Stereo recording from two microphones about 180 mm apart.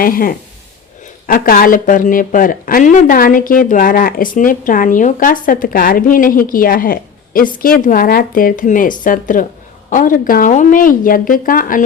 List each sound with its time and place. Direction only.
0.0 s speech: 50° left (ahead or behind)